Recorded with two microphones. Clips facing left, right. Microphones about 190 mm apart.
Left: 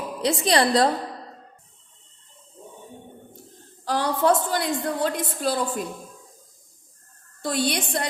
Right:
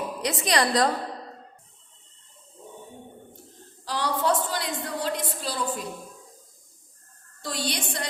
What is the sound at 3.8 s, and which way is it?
A woman's voice, 50° left (ahead or behind).